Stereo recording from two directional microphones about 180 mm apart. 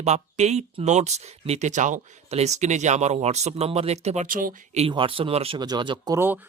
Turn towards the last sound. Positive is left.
turn(degrees=-10)  # may be behind; listen again after turning